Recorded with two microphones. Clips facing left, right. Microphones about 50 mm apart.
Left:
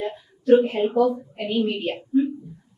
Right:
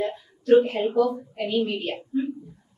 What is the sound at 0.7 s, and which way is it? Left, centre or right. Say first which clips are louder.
A woman's voice: left 2 dB; centre.